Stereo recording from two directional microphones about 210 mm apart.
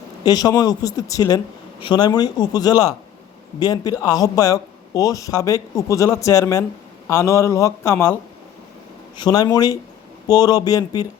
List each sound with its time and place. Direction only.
0.3 s a man's voice: 20° left (ahead or behind)
9.1 s a man's voice: 20° left (ahead or behind)